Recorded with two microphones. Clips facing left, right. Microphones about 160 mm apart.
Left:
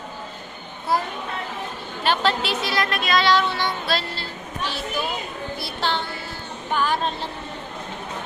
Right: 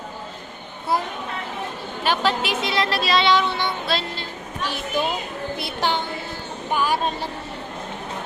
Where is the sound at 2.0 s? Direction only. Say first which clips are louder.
Even; 10° right (ahead or behind).